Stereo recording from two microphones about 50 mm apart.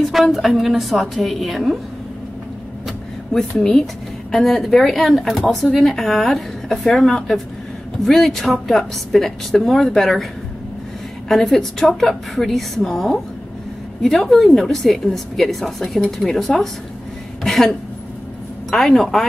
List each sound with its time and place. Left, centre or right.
0.1 s a woman's voice: centre
3.3 s a woman's voice: centre
11.2 s a woman's voice: centre
17.4 s a sound: centre
18.7 s a woman's voice: centre